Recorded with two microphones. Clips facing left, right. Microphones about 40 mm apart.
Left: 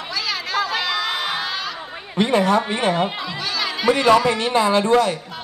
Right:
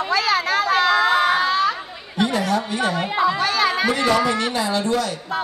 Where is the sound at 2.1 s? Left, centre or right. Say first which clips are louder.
Left 3 dB; left.